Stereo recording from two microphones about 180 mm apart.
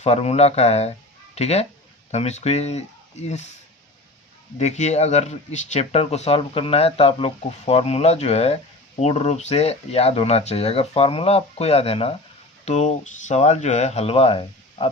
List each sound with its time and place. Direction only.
0.0 s speech: 35° left (ahead or behind)
4.5 s speech: 40° left (ahead or behind)